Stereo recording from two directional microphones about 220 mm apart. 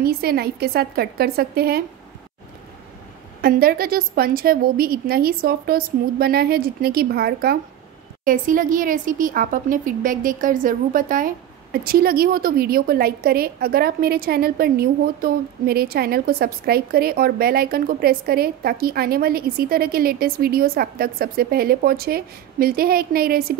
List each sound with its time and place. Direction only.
0.0 s a woman's voice: 45° right (ahead or behind)
3.3 s a woman's voice: 45° right (ahead or behind)